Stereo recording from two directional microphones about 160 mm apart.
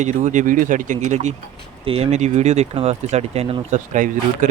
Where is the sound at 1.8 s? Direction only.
35° right (ahead or behind).